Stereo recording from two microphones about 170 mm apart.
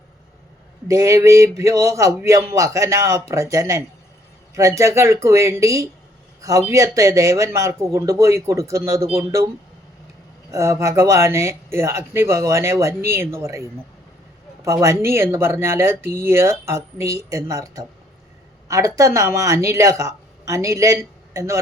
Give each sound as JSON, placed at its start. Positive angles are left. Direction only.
{"t": 0.9, "sound": "speech", "side_deg": -20}
{"t": 10.5, "sound": "speech", "side_deg": -15}